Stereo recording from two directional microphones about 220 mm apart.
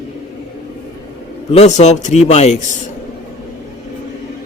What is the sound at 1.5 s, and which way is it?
A man's voice, 30° left (ahead or behind).